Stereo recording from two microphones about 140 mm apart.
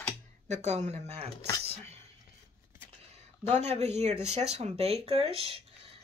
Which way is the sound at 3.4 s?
50° right (ahead or behind).